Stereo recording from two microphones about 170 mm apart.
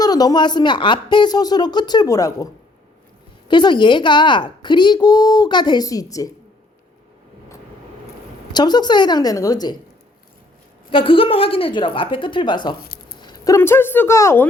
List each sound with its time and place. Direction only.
0.0 s a woman's voice: 20° left (ahead or behind)
3.5 s a woman's voice: 25° left (ahead or behind)
8.5 s a woman's voice: 25° left (ahead or behind)
10.9 s a woman's voice: 30° left (ahead or behind); by 14.4 s 15° left (ahead or behind)